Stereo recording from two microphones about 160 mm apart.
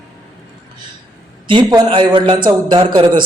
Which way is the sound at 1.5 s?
30° right (ahead or behind).